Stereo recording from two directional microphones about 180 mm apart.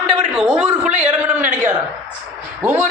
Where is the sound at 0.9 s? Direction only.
40° right (ahead or behind).